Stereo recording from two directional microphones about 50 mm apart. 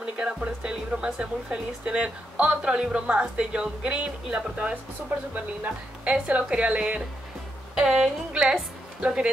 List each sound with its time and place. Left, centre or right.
0.0 s speech: centre
6.0 s speech: right
7.8 s a woman's voice: centre